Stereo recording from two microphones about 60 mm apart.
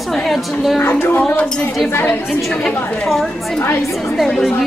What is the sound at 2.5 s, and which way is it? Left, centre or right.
Speech, centre.